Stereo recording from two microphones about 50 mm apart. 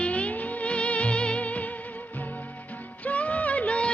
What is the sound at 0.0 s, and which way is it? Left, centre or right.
Music, left.